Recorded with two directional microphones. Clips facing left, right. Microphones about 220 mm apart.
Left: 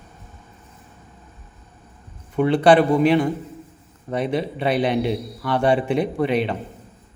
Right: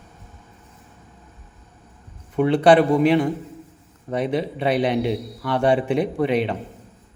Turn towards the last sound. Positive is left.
turn(degrees=-15)  # may be behind; listen again after turning